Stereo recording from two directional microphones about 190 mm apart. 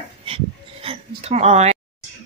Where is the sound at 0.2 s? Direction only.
30° right (ahead or behind).